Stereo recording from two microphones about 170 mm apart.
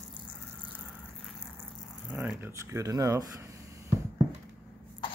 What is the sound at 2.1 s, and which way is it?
Speech, 10° right (ahead or behind).